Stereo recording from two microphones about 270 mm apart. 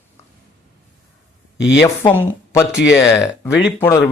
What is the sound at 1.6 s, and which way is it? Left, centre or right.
Speech, left.